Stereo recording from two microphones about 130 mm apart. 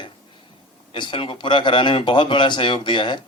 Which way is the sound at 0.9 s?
40° left (ahead or behind).